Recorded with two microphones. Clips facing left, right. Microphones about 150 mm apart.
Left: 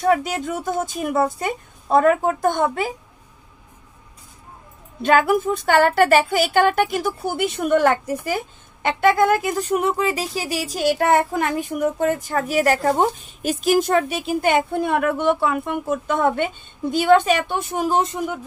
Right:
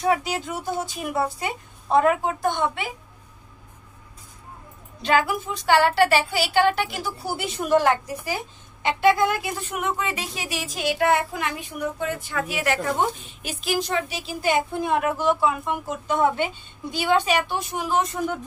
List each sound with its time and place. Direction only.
0.1 s speech: 55° left (ahead or behind)
5.0 s speech: 50° left (ahead or behind)
17.9 s speech: 25° left (ahead or behind)